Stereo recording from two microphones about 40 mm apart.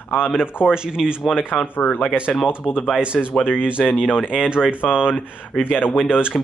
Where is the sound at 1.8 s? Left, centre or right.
Left.